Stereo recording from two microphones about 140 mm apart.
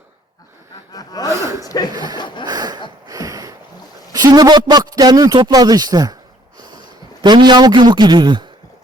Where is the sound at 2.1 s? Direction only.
35° left (ahead or behind).